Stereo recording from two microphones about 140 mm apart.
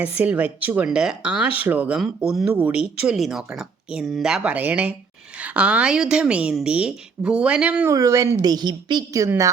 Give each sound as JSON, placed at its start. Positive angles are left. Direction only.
{"t": 0.0, "sound": "a woman's voice", "side_deg": -10}
{"t": 7.9, "sound": "a woman's voice", "side_deg": -25}